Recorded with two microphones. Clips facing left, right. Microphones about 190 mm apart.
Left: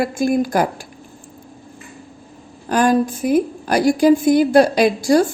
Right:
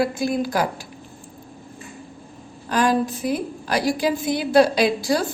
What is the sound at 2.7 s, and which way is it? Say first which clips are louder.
A woman's voice: left 4 dB; 50° left (ahead or behind).